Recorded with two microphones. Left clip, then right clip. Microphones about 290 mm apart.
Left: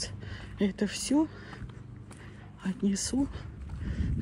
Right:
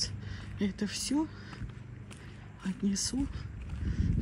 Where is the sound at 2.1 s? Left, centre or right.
Centre.